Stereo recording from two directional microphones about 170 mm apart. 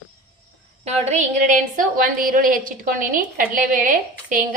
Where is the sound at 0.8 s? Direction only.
45° right (ahead or behind).